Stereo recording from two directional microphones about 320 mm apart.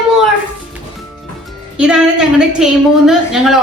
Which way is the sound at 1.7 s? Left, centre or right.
Centre.